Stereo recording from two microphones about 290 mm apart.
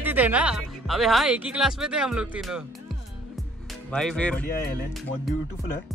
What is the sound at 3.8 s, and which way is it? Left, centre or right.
Speech, centre.